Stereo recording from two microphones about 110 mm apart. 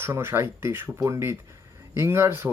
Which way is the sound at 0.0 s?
20° right (ahead or behind).